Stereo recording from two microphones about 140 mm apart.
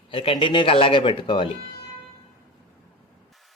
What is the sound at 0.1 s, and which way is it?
Speech, 40° left (ahead or behind).